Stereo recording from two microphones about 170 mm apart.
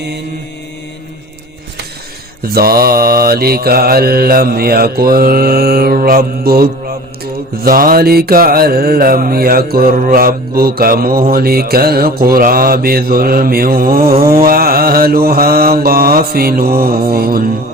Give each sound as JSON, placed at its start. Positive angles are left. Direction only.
{"t": 2.5, "sound": "mantra", "side_deg": -60}